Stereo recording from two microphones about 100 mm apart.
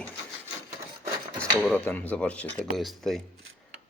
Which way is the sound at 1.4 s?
10° left (ahead or behind).